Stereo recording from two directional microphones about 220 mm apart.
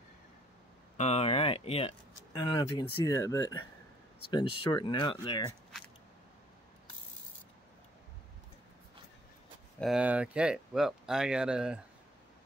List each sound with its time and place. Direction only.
0.9 s speech: 30° left (ahead or behind)
9.8 s speech: 5° right (ahead or behind)